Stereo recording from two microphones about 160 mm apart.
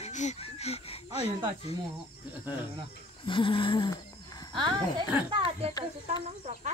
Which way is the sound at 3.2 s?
30° left (ahead or behind).